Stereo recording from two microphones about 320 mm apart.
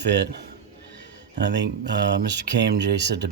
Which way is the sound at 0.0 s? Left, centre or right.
Right.